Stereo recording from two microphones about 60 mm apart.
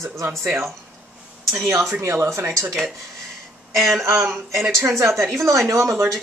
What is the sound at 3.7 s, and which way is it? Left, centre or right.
Speech, centre.